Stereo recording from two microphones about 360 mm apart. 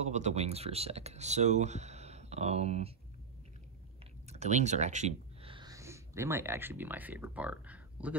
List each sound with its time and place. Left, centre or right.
0.0 s speech: centre
4.3 s speech: centre